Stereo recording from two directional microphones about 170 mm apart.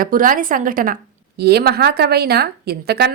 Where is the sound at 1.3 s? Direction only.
70° right (ahead or behind).